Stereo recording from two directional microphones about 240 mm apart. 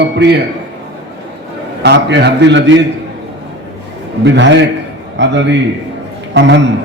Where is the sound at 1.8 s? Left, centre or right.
Right.